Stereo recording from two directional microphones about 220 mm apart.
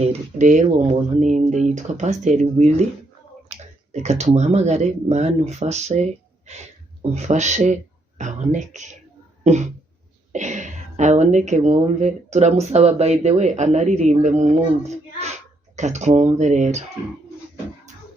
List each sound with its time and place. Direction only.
0.0 s speech: 30° right (ahead or behind)
3.5 s finger snapping: 30° right (ahead or behind)
3.9 s speech: 30° right (ahead or behind)
9.4 s a sound: 30° right (ahead or behind)
10.3 s speech: 35° right (ahead or behind)